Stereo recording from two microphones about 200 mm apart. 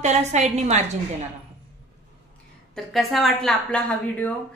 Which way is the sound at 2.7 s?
Centre (ahead or behind).